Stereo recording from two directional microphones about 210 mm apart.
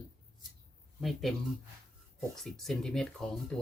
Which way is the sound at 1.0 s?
Centre (ahead or behind).